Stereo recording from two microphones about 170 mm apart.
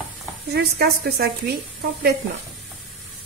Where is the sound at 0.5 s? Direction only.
70° right (ahead or behind).